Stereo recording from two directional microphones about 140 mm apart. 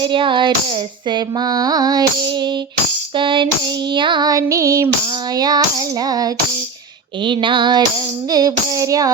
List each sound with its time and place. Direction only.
0.0 s female singing: 35° right (ahead or behind)
1.1 s music: 30° right (ahead or behind)
3.2 s female singing: 35° right (ahead or behind)
3.9 s music: 35° right (ahead or behind)
7.3 s female singing: 35° right (ahead or behind)
8.3 s music: 25° right (ahead or behind)